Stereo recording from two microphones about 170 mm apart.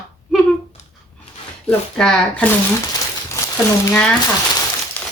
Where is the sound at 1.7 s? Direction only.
5° left (ahead or behind).